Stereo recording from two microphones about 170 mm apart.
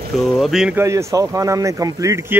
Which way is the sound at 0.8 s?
15° right (ahead or behind).